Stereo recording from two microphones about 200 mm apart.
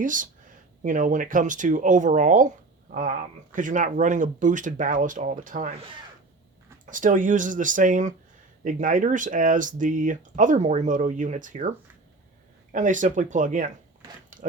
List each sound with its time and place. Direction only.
0.0 s speech: 40° right (ahead or behind)
6.9 s speech: 40° right (ahead or behind)
12.7 s speech: 40° right (ahead or behind)